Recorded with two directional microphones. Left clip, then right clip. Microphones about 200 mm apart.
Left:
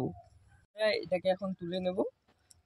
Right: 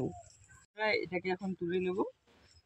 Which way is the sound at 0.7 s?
35° left (ahead or behind).